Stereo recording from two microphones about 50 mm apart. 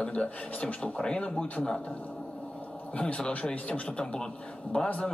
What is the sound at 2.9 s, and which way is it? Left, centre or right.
Speech, centre.